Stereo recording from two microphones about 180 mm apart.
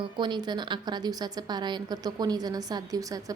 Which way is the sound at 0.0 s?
25° right (ahead or behind).